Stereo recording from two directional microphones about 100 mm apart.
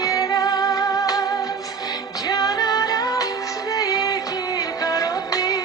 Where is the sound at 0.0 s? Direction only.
35° left (ahead or behind).